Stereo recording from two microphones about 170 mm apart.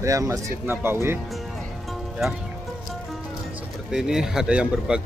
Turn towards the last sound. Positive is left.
turn(degrees=-5)  # may be behind; listen again after turning